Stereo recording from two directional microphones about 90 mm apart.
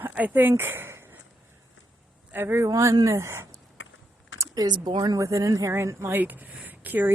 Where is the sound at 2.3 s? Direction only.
25° right (ahead or behind).